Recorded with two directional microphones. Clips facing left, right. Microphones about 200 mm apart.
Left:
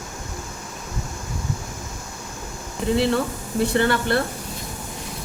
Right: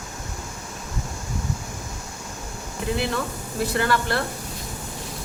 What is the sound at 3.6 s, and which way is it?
Speech, 30° left (ahead or behind).